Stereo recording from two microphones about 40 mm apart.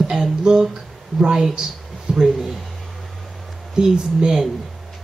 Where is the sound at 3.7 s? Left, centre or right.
Centre.